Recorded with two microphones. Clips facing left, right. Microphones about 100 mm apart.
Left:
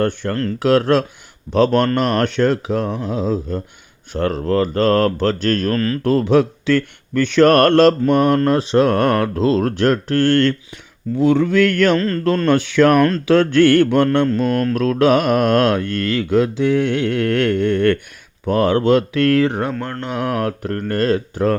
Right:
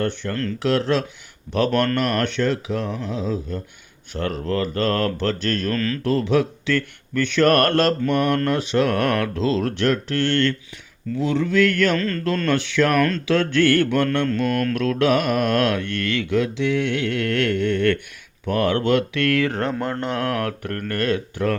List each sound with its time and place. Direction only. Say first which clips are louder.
0.0 s speech: left 5 dB; 45° left (ahead or behind)
1.7 s speech: left 4 dB; 30° left (ahead or behind)
19.5 s speech: left 3 dB; 15° left (ahead or behind)
19.8 s speech: right 1 dB; 5° right (ahead or behind)
20.1 s speech: left 6 dB; 15° left (ahead or behind); by 21.6 s 35° left (ahead or behind)